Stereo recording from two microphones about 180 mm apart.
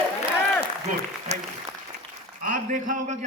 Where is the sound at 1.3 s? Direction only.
40° right (ahead or behind).